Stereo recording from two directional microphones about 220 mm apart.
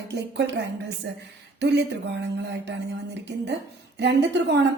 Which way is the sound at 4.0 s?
50° right (ahead or behind).